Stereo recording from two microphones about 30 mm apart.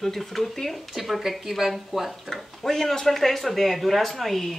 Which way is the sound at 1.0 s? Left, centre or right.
Centre.